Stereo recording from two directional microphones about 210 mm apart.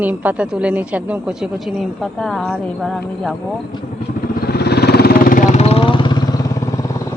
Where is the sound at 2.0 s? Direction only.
Centre (ahead or behind).